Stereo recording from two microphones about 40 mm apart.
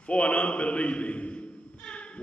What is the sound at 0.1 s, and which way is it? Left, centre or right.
A man's voice, left.